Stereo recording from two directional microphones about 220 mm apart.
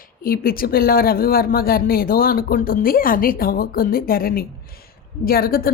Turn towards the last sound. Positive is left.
turn(degrees=40)  # may be behind; listen again after turning